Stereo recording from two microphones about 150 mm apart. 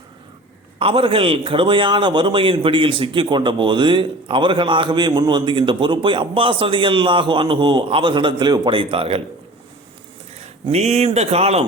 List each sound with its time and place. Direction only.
0.8 s a man's voice: 35° right (ahead or behind)
10.7 s speech: 45° right (ahead or behind)